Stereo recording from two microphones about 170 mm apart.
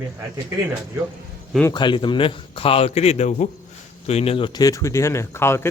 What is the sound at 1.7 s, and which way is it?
A man's voice, 25° left (ahead or behind).